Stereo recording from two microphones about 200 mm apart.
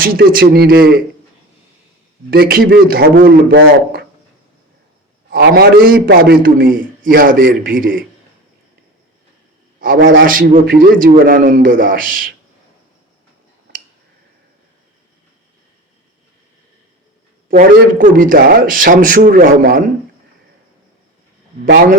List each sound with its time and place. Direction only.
0.0 s a man's voice: 45° right (ahead or behind)
2.3 s a man's voice: 50° right (ahead or behind)
5.3 s a man's voice: 50° right (ahead or behind)
9.8 s a man's voice: 45° right (ahead or behind)
17.5 s a man's voice: 40° right (ahead or behind)